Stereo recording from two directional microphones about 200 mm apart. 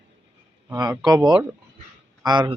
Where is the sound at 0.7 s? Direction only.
20° right (ahead or behind).